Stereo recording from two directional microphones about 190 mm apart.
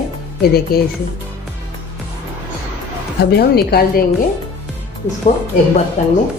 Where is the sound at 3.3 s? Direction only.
55° left (ahead or behind).